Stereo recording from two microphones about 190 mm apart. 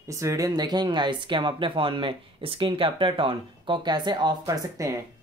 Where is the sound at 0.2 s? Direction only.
15° right (ahead or behind).